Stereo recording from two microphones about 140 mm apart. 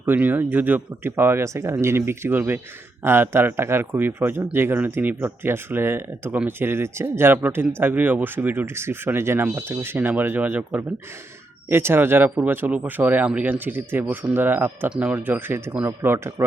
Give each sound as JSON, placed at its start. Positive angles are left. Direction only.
{"t": 0.0, "sound": "speech", "side_deg": -15}